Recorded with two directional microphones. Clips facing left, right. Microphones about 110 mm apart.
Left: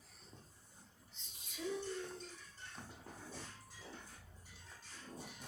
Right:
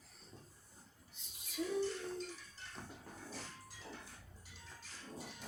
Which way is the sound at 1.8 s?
90° right.